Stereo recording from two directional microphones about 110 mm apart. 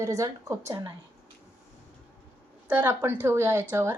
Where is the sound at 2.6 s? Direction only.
20° right (ahead or behind).